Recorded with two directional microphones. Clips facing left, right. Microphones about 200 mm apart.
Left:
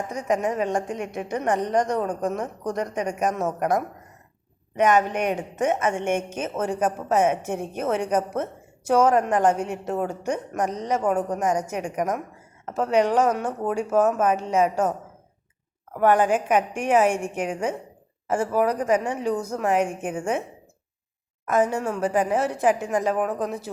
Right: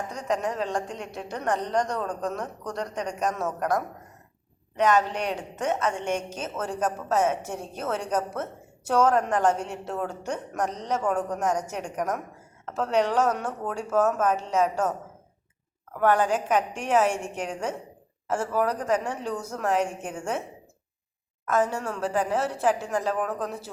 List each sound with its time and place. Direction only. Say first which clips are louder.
0.3 s a woman's voice: left 4 dB; 15° left (ahead or behind)
21.4 s a woman's voice: left 3 dB; 15° left (ahead or behind)